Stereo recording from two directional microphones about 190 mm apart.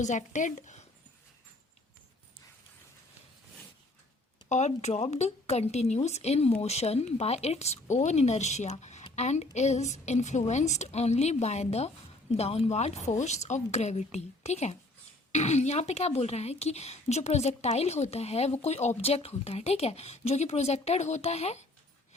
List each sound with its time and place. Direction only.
0.0 s a woman's voice: 40° left (ahead or behind)
4.4 s a woman's voice: 35° left (ahead or behind)